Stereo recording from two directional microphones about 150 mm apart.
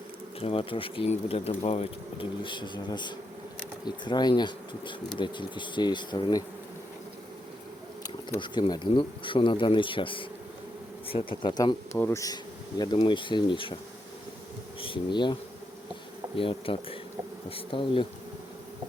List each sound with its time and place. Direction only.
0.3 s speech: 40° left (ahead or behind)
8.0 s speech: 30° left (ahead or behind)
11.9 s speech: 15° left (ahead or behind)
12.8 s speech: 30° left (ahead or behind)
14.8 s speech: 35° left (ahead or behind)